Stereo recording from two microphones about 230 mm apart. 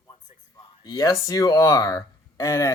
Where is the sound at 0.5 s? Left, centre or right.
Centre.